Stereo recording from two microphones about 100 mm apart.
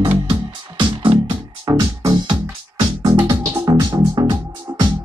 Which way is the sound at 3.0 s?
45° right (ahead or behind).